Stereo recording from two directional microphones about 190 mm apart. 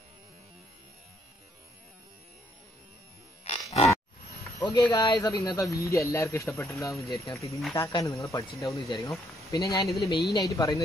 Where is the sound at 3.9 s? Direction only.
15° left (ahead or behind).